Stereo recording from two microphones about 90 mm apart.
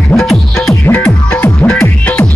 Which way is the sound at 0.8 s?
20° left (ahead or behind).